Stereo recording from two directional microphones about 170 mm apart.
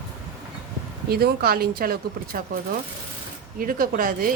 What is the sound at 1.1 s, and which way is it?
Speech, 65° right (ahead or behind).